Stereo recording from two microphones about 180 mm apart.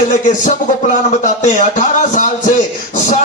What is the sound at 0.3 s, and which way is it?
Speech, 45° left (ahead or behind).